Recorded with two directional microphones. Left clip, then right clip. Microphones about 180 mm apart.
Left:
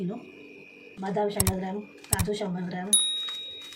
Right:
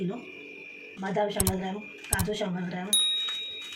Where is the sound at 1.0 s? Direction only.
Centre (ahead or behind).